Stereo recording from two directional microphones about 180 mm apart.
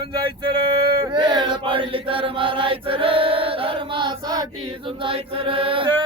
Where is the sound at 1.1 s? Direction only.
25° right (ahead or behind).